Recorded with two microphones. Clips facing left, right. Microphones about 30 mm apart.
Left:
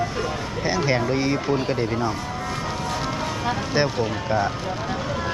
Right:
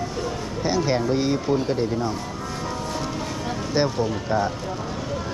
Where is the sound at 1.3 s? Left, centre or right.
Left.